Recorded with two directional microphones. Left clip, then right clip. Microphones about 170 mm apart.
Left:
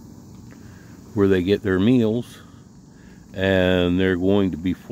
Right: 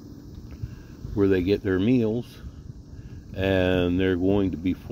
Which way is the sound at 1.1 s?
20° left (ahead or behind).